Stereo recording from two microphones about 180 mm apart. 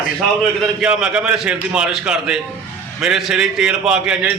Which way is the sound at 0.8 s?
5° right (ahead or behind).